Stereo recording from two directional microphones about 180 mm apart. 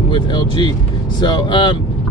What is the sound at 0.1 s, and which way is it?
Speech, 25° left (ahead or behind).